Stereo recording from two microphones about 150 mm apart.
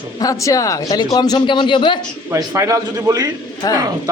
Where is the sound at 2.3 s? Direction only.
20° right (ahead or behind).